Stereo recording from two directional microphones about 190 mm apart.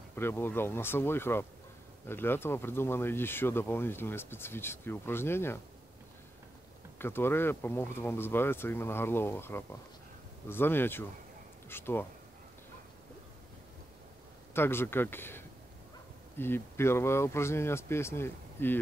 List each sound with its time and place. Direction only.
0.1 s speech: 10° left (ahead or behind)
7.0 s speech: 10° left (ahead or behind)
14.5 s speech: 10° left (ahead or behind)